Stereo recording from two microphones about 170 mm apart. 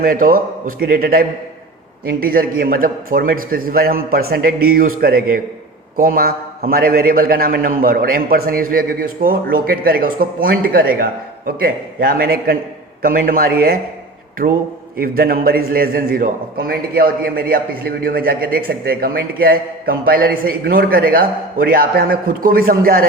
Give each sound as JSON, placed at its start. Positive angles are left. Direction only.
{"t": 0.0, "sound": "a man's voice", "side_deg": -60}